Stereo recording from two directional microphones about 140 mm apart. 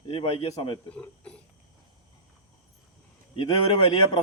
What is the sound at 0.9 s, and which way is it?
Speech, 10° left (ahead or behind).